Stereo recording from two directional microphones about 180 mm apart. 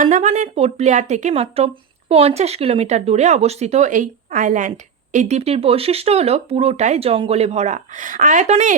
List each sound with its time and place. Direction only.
0.0 s speech: 40° right (ahead or behind)